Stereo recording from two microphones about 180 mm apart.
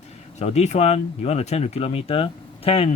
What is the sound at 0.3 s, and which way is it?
Speech, 35° left (ahead or behind).